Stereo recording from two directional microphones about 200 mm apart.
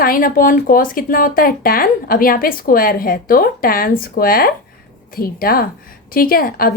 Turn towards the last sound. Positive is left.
turn(degrees=45)  # may be behind; listen again after turning